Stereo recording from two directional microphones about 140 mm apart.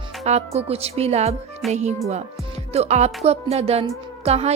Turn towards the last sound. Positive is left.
turn(degrees=-50)  # may be behind; listen again after turning